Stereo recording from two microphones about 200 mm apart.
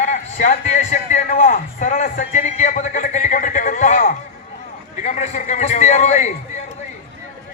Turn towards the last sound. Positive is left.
turn(degrees=35)  # may be behind; listen again after turning